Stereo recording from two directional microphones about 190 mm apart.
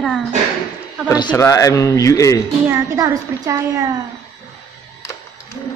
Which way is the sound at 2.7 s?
15° right (ahead or behind).